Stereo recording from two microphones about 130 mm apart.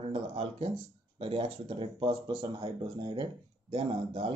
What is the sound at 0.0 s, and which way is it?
Speech, 45° right (ahead or behind).